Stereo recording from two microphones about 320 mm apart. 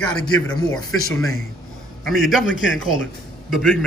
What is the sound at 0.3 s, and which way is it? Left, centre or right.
Speech, centre.